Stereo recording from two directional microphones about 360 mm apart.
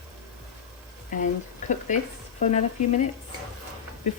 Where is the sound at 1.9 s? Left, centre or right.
Centre.